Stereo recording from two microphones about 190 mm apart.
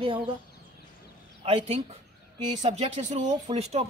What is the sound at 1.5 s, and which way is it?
Speech, 35° right (ahead or behind).